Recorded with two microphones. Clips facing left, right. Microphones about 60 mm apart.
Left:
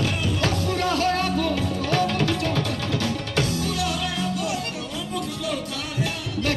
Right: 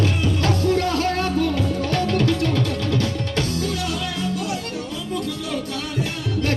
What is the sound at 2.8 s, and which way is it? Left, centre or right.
Music, right.